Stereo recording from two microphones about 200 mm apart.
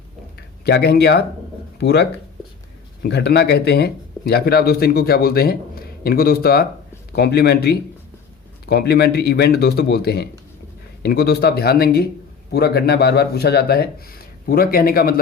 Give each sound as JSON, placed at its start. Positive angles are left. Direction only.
{"t": 0.3, "sound": "speech", "side_deg": 55}